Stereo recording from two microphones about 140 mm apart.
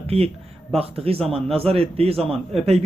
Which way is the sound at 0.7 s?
45° right (ahead or behind).